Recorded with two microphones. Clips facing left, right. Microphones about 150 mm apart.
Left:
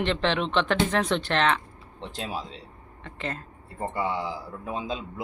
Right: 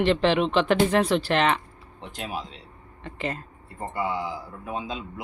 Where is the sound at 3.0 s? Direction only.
10° right (ahead or behind).